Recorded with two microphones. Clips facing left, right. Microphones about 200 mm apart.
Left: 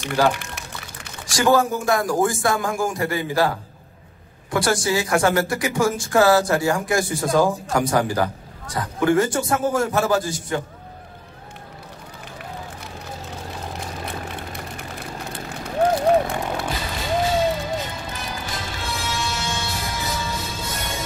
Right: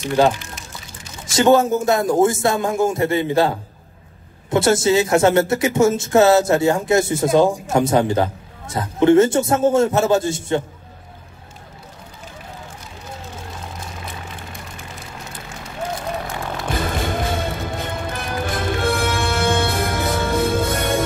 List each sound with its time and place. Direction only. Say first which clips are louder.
0.3 s pour: even; 65° left (ahead or behind)
1.2 s a man's voice: right 4 dB; 25° right (ahead or behind)
15.8 s a sound: left 8 dB; 65° left (ahead or behind)
16.7 s music: right 6 dB; 55° right (ahead or behind)